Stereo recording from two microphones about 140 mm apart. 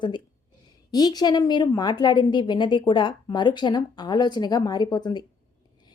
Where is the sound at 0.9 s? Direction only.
30° left (ahead or behind).